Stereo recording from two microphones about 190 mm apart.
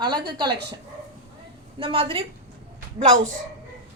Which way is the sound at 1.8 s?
25° right (ahead or behind).